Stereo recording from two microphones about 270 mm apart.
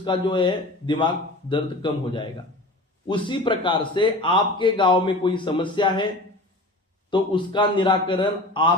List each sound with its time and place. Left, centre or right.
0.0 s a man's voice: centre
7.1 s a man's voice: centre